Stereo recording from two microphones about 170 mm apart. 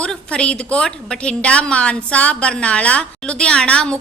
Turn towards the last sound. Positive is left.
turn(degrees=5)  # may be behind; listen again after turning